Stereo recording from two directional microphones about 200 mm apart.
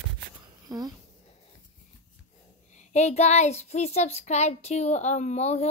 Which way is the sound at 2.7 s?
35° left (ahead or behind).